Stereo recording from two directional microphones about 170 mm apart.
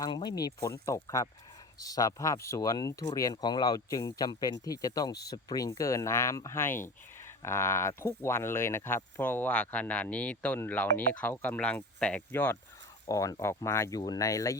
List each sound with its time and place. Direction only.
0.0 s speech: 25° left (ahead or behind)